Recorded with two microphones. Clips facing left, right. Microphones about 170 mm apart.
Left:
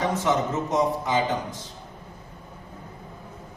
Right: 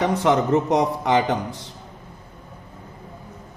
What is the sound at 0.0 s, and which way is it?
A man's voice, 65° right (ahead or behind).